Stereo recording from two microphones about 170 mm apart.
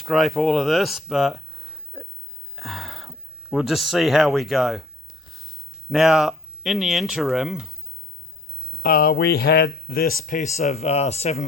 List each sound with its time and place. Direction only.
0.0 s speech: centre (ahead or behind)
8.8 s speech: 60° left (ahead or behind); by 11.4 s 40° left (ahead or behind)